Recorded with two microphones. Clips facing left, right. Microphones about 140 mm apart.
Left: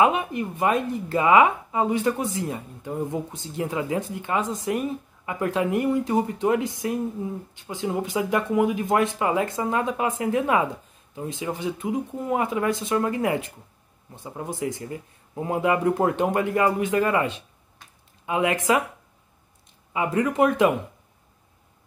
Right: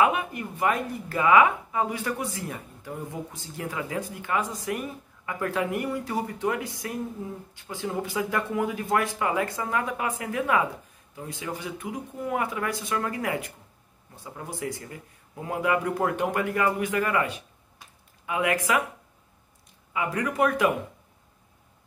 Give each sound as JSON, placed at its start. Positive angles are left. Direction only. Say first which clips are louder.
{"t": 0.0, "sound": "speech", "louder": "left 3 dB", "side_deg": 25}
{"t": 19.9, "sound": "speech", "louder": "left 5 dB", "side_deg": 25}